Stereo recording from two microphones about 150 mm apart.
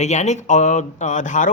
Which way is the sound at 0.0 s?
50° left (ahead or behind).